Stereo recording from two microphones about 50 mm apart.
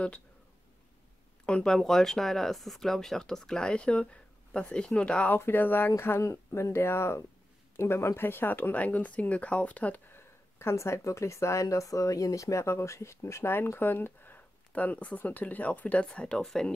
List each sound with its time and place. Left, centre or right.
1.4 s speech: left
1.7 s speech: centre; by 5.3 s left
5.4 s speech: left
6.2 s speech: left
8.7 s speech: left
10.1 s speech: left
16.3 s speech: centre